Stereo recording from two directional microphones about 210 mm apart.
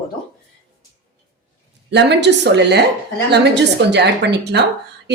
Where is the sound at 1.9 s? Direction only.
55° right (ahead or behind).